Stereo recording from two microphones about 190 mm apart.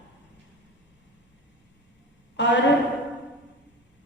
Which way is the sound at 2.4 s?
70° left (ahead or behind).